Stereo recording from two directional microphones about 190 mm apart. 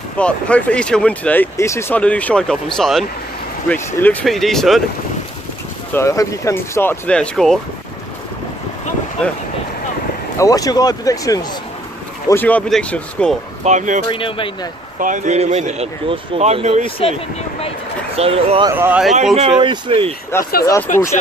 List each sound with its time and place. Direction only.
0.2 s speech: 5° left (ahead or behind)
5.9 s speech: 15° left (ahead or behind)
10.4 s speech: 20° left (ahead or behind); by 13.4 s 5° left (ahead or behind)
13.7 s speech: 40° right (ahead or behind)
14.0 s speech: 25° left (ahead or behind)
15.0 s speech: 40° right (ahead or behind)
18.1 s speech: 30° right (ahead or behind)
18.7 s speech: 10° right (ahead or behind)
19.6 s speech: 25° right (ahead or behind)
20.6 s speech: 15° left (ahead or behind)